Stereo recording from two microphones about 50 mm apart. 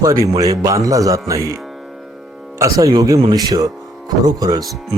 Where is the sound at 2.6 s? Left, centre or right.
Right.